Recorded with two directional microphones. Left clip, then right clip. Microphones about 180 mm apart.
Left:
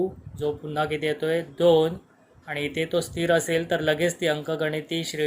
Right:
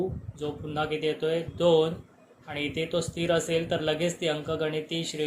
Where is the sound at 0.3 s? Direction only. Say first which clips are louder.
Left 5 dB; 35° left (ahead or behind).